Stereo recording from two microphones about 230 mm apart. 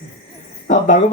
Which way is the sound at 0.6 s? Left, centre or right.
Left.